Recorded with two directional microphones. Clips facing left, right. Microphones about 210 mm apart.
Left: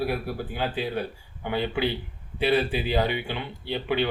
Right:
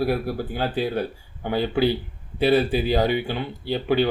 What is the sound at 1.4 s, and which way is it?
Speech, 40° right (ahead or behind).